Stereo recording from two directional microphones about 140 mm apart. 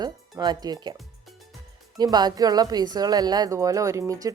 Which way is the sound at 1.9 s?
30° right (ahead or behind).